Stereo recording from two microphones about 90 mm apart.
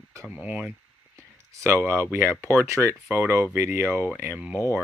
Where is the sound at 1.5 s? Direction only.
35° right (ahead or behind).